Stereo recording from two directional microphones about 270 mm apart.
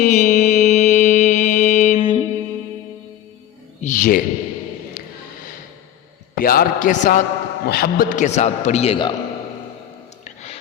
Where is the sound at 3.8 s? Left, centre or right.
Left.